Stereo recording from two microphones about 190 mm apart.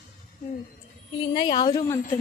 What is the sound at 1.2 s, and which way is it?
Speech, 25° left (ahead or behind).